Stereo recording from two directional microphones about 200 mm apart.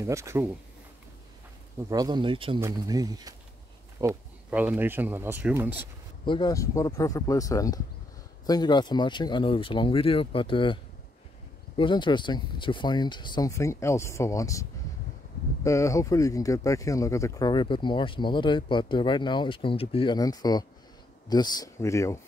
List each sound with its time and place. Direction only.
0.0 s speech: 15° right (ahead or behind)
1.9 s speech: 20° right (ahead or behind)
6.2 s speech: 20° left (ahead or behind)